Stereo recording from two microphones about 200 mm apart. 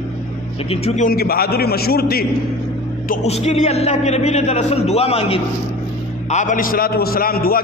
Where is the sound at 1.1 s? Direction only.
50° left (ahead or behind).